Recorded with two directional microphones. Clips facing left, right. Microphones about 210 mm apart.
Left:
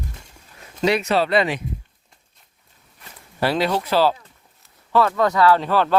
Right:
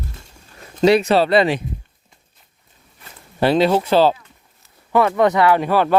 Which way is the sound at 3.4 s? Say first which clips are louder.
Right 5 dB; 25° right (ahead or behind).